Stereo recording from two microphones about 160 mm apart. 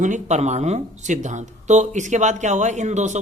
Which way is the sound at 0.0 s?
50° right (ahead or behind).